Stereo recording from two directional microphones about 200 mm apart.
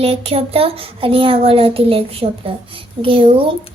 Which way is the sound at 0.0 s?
30° right (ahead or behind).